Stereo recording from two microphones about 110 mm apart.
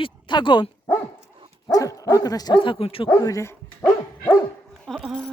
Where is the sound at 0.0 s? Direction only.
45° left (ahead or behind).